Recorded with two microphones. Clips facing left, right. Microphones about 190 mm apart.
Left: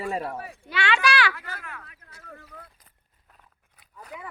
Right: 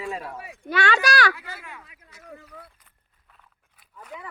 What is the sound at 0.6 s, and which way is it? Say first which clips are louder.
Speech: right 2 dB; 45° right (ahead or behind).